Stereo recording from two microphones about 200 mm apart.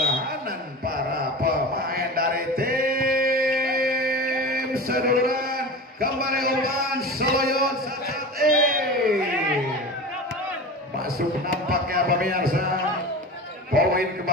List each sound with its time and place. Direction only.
0.8 s mantra: 45° right (ahead or behind)
7.2 s a man's voice: 50° right (ahead or behind)
8.4 s a sound: 45° right (ahead or behind)
11.7 s a man's voice: 50° right (ahead or behind)
13.7 s a man's voice: 50° right (ahead or behind)